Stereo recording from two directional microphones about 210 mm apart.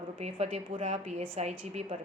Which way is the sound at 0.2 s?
30° right (ahead or behind).